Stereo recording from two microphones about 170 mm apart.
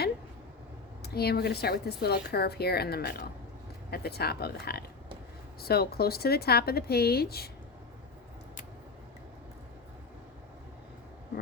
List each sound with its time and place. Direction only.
1.0 s a woman's voice: 70° left (ahead or behind)